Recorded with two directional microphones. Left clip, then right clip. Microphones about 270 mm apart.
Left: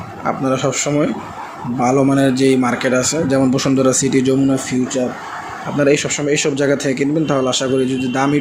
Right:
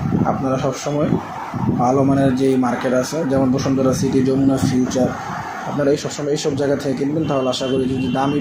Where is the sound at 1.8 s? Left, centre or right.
Left.